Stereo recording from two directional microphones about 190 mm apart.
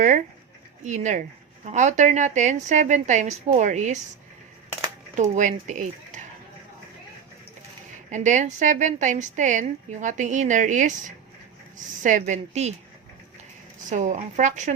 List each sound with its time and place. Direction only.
0.9 s a woman's voice: 40° right (ahead or behind)
5.1 s speech: 40° right (ahead or behind)
8.1 s a woman's voice: 40° right (ahead or behind)
13.9 s a woman's voice: 40° right (ahead or behind)